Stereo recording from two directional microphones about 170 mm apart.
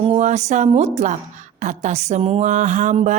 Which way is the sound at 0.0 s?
40° right (ahead or behind).